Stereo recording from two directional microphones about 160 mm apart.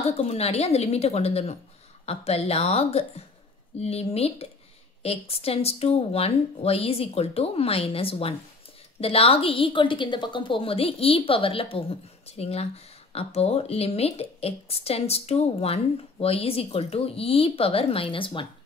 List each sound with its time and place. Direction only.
0.2 s a woman's voice: 40° left (ahead or behind)